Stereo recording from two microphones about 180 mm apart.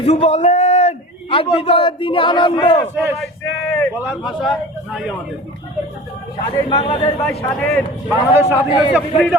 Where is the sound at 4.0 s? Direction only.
5° right (ahead or behind).